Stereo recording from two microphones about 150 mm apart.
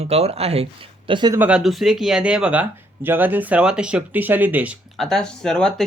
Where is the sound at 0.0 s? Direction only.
45° right (ahead or behind).